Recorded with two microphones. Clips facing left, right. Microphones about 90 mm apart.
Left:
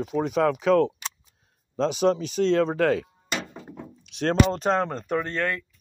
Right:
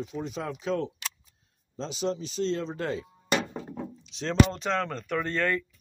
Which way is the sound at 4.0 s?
60° left (ahead or behind).